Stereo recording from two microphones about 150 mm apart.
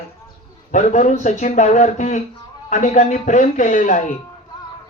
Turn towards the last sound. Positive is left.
turn(degrees=60)  # may be behind; listen again after turning